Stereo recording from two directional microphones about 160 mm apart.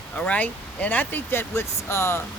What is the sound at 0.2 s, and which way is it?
Speech, 10° left (ahead or behind).